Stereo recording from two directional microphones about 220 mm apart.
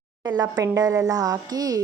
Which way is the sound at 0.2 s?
15° right (ahead or behind).